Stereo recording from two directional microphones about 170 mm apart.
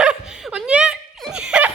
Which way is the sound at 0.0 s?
5° right (ahead or behind).